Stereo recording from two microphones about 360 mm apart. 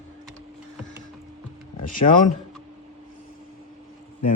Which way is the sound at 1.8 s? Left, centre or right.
Left.